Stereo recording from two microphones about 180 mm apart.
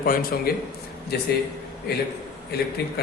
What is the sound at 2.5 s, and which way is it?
Speech, 60° left (ahead or behind).